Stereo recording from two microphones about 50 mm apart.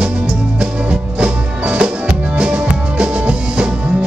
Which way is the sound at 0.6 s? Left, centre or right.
Right.